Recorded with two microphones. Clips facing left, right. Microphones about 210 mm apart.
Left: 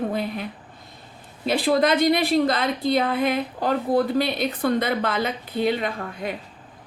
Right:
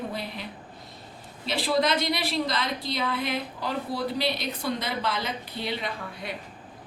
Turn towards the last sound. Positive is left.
turn(degrees=50)  # may be behind; listen again after turning